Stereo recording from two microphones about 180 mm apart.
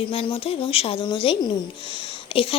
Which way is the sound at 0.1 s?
30° left (ahead or behind).